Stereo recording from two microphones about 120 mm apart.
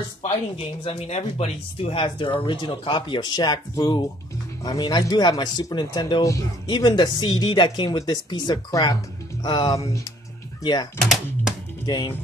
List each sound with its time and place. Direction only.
0.6 s speech: 60° left (ahead or behind); by 10.9 s 35° left (ahead or behind)
11.0 s speech: centre (ahead or behind)
11.8 s speech: 35° left (ahead or behind)